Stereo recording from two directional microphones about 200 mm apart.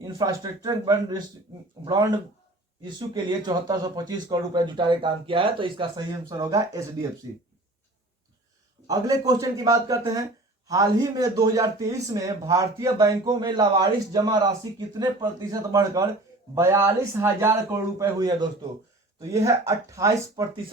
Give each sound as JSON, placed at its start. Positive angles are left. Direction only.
{"t": 0.0, "sound": "speech", "side_deg": -20}
{"t": 8.9, "sound": "speech", "side_deg": -20}